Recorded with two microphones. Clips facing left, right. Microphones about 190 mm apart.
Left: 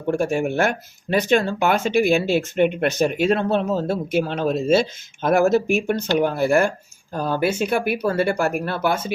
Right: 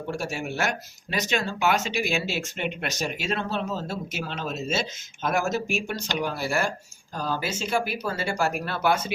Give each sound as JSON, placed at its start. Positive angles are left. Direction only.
{"t": 0.1, "sound": "speech", "side_deg": 50}